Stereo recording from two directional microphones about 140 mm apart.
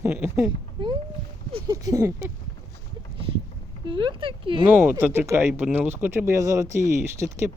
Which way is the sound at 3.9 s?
35° right (ahead or behind).